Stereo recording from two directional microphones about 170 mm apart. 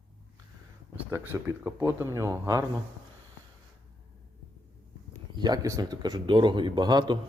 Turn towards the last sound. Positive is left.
turn(degrees=-25)  # may be behind; listen again after turning